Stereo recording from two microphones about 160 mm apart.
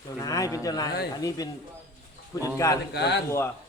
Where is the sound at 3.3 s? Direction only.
15° left (ahead or behind).